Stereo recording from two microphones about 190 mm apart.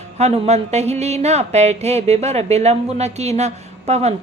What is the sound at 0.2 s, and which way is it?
A woman's voice, 35° right (ahead or behind).